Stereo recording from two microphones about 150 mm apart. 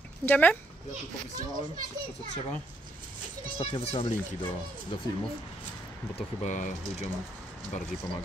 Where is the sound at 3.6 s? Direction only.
45° left (ahead or behind).